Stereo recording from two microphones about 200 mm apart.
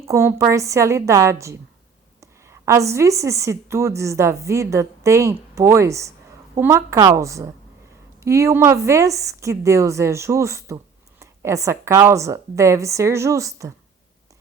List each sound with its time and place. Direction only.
0.0 s a woman's voice: 15° right (ahead or behind)